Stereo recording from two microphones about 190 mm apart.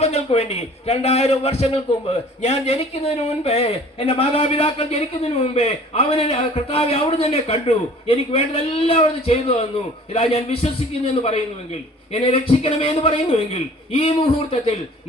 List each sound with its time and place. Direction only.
0.0 s a man's voice: 35° left (ahead or behind)